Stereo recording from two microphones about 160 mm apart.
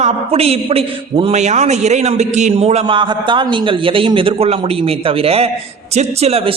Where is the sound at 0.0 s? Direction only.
40° right (ahead or behind).